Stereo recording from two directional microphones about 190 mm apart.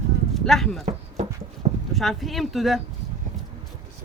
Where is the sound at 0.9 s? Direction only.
35° right (ahead or behind).